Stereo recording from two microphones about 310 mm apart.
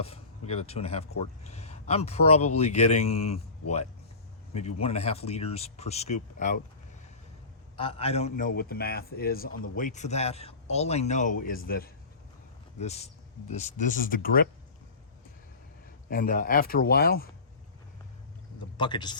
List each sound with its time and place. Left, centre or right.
0.0 s a man's voice: centre
7.8 s a man's voice: centre
16.0 s a man's voice: left
18.8 s speech: centre